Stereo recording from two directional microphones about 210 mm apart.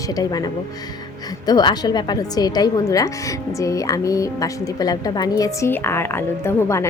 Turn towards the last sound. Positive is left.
turn(degrees=15)  # may be behind; listen again after turning